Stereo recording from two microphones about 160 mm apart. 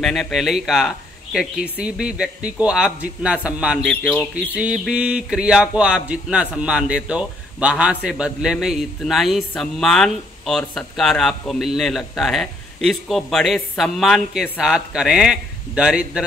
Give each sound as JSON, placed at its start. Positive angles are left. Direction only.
{"t": 0.0, "sound": "speech", "side_deg": 0}